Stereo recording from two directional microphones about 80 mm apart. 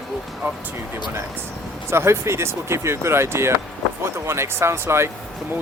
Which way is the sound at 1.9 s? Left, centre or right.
Right.